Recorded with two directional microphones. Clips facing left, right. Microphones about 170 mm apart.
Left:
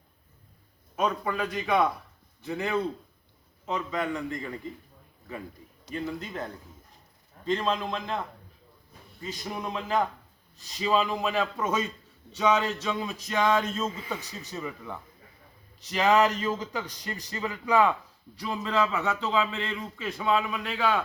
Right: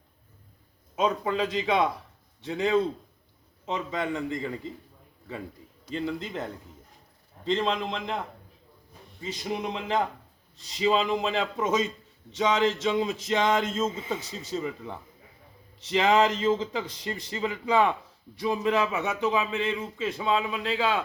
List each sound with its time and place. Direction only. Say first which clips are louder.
1.5 s a man's voice: even; 20° right (ahead or behind)
5.9 s a man's voice: right 2 dB; 25° right (ahead or behind)
7.4 s a man's voice: right 1 dB; 25° right (ahead or behind)
9.2 s a man's voice: right 3 dB; 20° right (ahead or behind)